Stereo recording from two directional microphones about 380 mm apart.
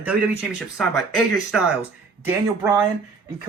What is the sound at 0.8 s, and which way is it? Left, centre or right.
Speech, centre.